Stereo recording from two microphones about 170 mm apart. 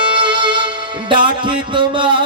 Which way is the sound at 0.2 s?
30° right (ahead or behind).